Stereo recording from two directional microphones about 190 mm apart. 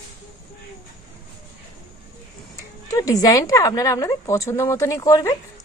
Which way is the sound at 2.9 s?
20° left (ahead or behind).